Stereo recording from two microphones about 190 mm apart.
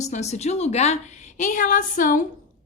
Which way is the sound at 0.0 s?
35° left (ahead or behind).